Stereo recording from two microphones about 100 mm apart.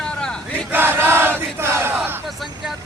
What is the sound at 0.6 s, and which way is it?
Crowd, 20° right (ahead or behind).